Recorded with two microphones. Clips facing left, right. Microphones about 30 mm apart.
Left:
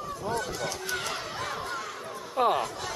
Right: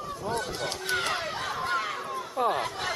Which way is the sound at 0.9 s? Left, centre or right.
Right.